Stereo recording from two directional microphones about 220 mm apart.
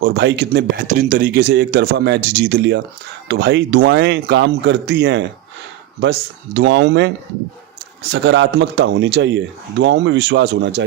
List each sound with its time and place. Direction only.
0.0 s speech: 50° right (ahead or behind)
8.1 s speech: 55° right (ahead or behind)